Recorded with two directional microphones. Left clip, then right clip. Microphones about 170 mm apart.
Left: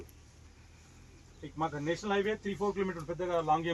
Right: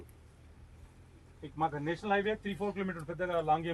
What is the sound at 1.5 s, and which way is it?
Speech, 5° right (ahead or behind).